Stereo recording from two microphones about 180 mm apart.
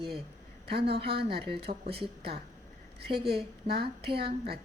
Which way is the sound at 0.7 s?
65° right (ahead or behind).